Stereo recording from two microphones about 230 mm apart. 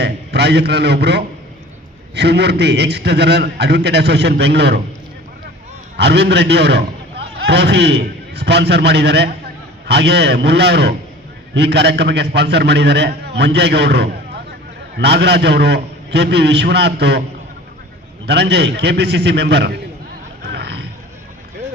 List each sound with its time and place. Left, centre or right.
0.0 s a man's voice: right
6.0 s a man's voice: right
18.3 s a man's voice: right
20.4 s a sound: right